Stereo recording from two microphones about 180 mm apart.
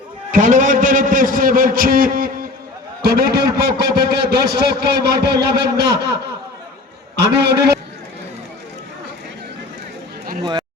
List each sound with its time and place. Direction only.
0.3 s a man's voice: 45° right (ahead or behind); by 6.1 s 65° right (ahead or behind)
7.2 s a man's voice: 65° right (ahead or behind)
10.4 s speech: 25° right (ahead or behind)